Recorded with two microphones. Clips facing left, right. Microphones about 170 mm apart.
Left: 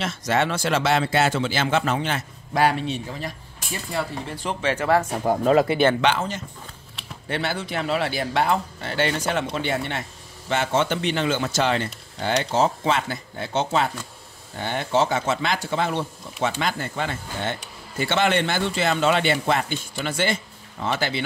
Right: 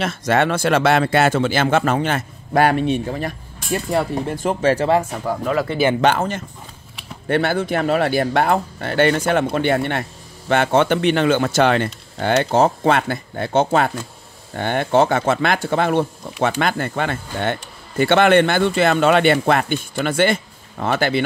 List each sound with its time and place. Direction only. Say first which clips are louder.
0.0 s speech: right 5 dB; 55° right (ahead or behind); by 4.8 s 40° right (ahead or behind)
5.2 s speech: left 3 dB; 35° left (ahead or behind)
5.9 s speech: right 5 dB; 50° right (ahead or behind)